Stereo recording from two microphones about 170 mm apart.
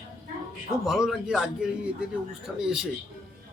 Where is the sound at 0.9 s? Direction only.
Centre (ahead or behind).